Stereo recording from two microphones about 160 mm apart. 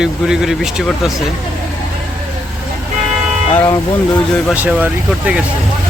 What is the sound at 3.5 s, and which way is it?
Speech, 15° left (ahead or behind).